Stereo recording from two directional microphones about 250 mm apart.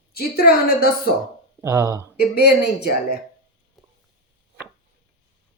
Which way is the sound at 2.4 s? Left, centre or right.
Left.